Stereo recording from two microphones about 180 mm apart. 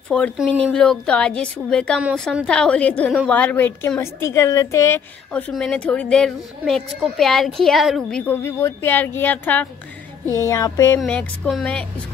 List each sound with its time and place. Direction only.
0.1 s a child's voice: 5° left (ahead or behind)
2.0 s a woman's voice: 5° right (ahead or behind)
2.2 s a child's voice: 5° left (ahead or behind)
11.0 s a child's voice: 5° left (ahead or behind)